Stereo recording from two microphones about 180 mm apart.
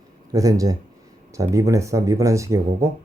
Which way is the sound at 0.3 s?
20° right (ahead or behind).